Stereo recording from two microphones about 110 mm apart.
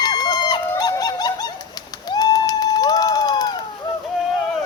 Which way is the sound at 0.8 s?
40° left (ahead or behind).